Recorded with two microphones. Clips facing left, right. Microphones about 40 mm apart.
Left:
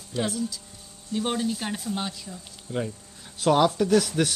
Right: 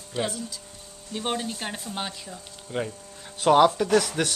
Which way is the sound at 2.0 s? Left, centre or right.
Centre.